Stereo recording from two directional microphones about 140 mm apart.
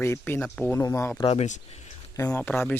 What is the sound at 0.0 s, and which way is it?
Speech, 15° left (ahead or behind).